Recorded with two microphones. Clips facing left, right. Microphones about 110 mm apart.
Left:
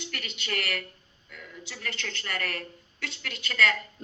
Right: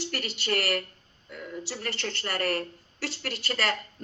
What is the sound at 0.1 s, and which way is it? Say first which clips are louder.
A woman's voice: right 4 dB; 35° right (ahead or behind).